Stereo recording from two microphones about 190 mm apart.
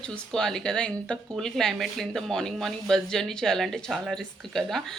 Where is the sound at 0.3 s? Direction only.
5° left (ahead or behind).